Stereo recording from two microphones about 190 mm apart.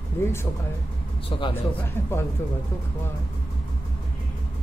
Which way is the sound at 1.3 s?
30° left (ahead or behind).